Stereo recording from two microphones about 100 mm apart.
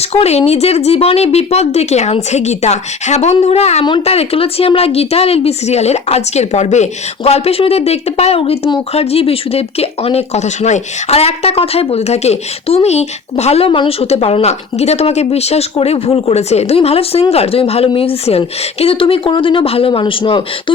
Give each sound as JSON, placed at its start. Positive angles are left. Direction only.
{"t": 0.1, "sound": "a woman's voice", "side_deg": 90}